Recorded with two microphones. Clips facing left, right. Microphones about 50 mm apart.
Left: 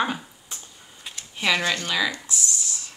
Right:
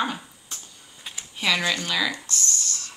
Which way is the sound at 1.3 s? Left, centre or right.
Centre.